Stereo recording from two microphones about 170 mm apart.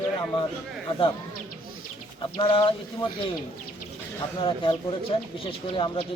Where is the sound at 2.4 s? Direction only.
30° left (ahead or behind).